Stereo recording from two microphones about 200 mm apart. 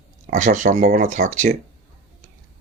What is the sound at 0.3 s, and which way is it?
Speech, 40° right (ahead or behind).